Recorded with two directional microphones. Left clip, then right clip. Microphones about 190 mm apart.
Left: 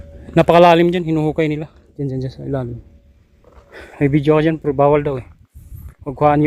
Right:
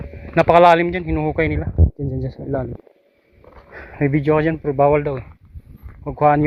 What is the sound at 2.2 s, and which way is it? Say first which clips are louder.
Speech: even; 25° left (ahead or behind).